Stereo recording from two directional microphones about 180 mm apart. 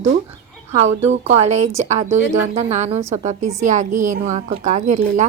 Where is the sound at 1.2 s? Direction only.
35° right (ahead or behind).